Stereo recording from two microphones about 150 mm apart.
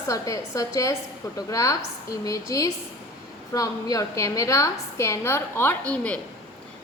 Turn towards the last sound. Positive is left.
turn(degrees=10)  # may be behind; listen again after turning